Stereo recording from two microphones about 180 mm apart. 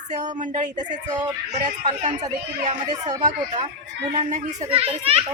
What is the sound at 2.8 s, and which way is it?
Speech, 25° right (ahead or behind).